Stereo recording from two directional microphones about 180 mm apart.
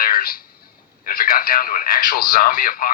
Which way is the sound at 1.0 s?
55° left (ahead or behind).